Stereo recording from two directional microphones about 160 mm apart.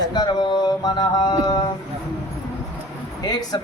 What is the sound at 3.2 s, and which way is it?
Speech, 25° left (ahead or behind).